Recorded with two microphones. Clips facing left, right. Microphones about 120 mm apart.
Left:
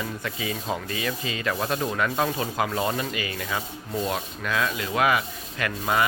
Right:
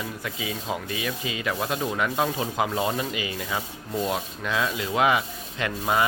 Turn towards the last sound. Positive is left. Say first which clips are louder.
# even
turn(degrees=-20)  # may be behind; listen again after turning